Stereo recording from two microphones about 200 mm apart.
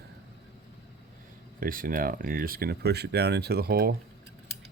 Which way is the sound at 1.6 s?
45° right (ahead or behind).